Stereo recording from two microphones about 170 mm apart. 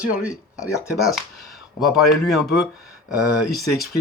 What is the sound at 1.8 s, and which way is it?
Speech, centre (ahead or behind).